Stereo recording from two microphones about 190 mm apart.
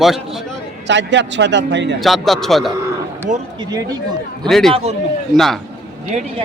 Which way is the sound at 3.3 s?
40° right (ahead or behind).